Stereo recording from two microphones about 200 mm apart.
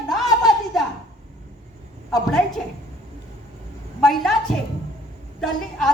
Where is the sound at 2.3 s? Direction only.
Centre (ahead or behind).